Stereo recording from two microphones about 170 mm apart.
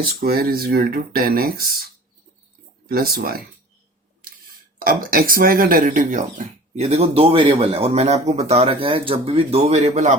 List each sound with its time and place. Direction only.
0.2 s speech: 60° right (ahead or behind)
2.9 s speech: 60° right (ahead or behind)
4.8 s speech: 55° right (ahead or behind)